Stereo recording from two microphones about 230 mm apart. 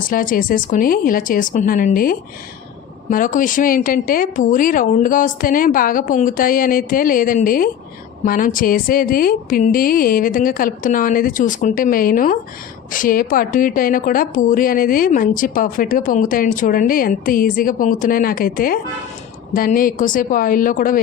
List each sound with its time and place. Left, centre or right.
0.0 s a woman's voice: left